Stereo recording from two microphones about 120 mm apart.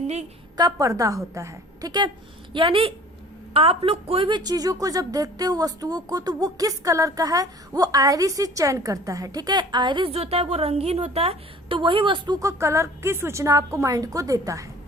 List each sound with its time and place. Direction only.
0.5 s a woman's voice: 30° right (ahead or behind)
2.5 s a woman's voice: 45° right (ahead or behind)
4.3 s a woman's voice: 35° right (ahead or behind)
12.4 s a woman's voice: 25° right (ahead or behind)